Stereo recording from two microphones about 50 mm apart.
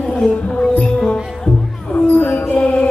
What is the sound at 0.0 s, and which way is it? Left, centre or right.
Music, centre.